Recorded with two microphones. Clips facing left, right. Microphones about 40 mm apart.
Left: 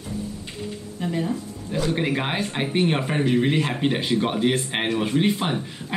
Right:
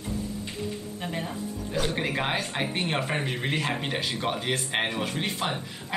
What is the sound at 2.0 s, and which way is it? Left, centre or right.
Speech, centre.